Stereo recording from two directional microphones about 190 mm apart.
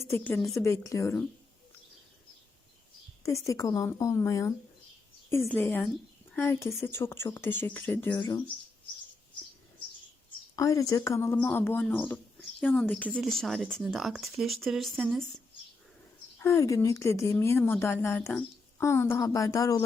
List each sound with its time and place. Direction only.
0.1 s speech: 10° left (ahead or behind)
3.2 s speech: 15° left (ahead or behind)
10.5 s speech: 15° left (ahead or behind); by 15.2 s centre (ahead or behind)
16.4 s speech: 15° left (ahead or behind)